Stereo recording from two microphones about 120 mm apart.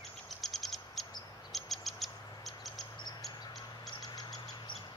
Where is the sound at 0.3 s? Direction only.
Centre (ahead or behind).